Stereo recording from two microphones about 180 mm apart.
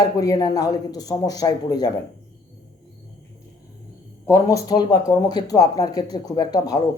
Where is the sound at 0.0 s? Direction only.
20° left (ahead or behind).